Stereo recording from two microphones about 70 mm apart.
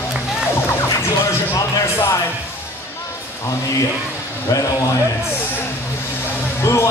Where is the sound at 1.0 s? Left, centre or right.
Left.